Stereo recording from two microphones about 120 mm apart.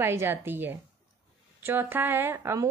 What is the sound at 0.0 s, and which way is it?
A woman's voice, 20° right (ahead or behind).